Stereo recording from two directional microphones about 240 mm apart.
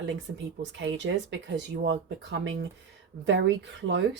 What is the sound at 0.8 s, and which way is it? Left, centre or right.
A woman's voice, right.